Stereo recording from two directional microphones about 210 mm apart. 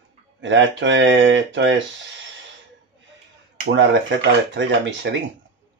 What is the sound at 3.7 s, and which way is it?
Speech, 60° right (ahead or behind).